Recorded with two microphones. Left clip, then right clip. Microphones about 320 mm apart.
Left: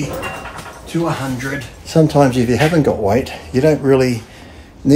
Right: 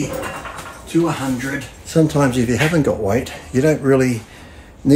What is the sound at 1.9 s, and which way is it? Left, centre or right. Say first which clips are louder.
Speech: left 4 dB; centre.